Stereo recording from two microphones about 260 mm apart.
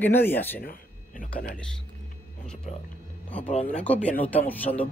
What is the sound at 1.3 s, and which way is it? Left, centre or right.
Speech, left.